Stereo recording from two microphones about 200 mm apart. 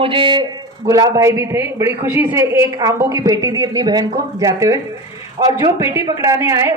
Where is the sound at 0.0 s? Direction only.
25° right (ahead or behind).